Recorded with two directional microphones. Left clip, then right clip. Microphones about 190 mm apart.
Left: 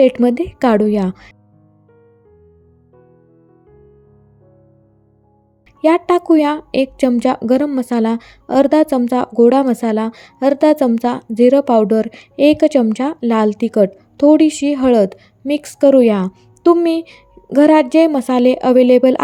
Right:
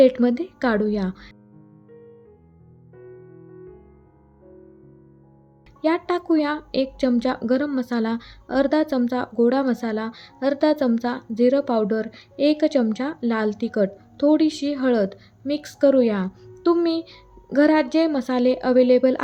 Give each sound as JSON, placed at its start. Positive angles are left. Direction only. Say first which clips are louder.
{"t": 0.0, "sound": "speech", "louder": "left 4 dB", "side_deg": 35}
{"t": 5.8, "sound": "speech", "louder": "left 9 dB", "side_deg": 35}